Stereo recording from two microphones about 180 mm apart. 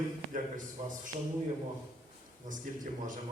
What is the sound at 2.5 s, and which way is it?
Speech, 45° right (ahead or behind).